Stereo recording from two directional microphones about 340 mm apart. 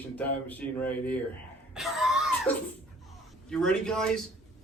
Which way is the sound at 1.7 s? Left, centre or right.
Centre.